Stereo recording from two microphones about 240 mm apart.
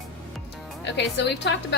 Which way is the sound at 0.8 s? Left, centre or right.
Left.